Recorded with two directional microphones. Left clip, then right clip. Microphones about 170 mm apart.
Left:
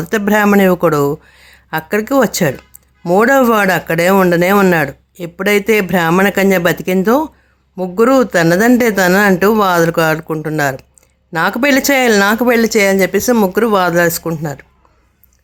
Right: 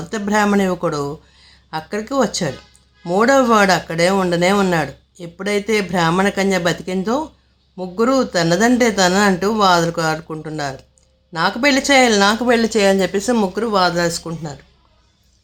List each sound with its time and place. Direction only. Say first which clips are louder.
0.0 s speech: left 5 dB; 40° left (ahead or behind); by 13.5 s 25° left (ahead or behind)
13.5 s speech: left 5 dB; 40° left (ahead or behind)